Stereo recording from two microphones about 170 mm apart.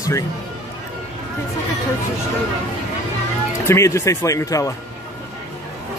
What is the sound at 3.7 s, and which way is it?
Speech, 15° left (ahead or behind).